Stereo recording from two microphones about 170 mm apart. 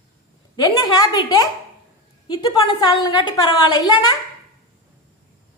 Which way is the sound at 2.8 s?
25° left (ahead or behind).